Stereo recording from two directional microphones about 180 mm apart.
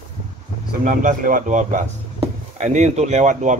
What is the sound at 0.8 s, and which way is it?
Speech, 45° right (ahead or behind).